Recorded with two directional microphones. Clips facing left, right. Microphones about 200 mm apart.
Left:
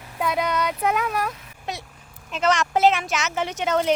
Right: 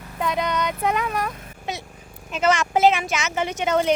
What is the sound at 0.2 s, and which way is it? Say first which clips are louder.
Speech: even; 5° left (ahead or behind).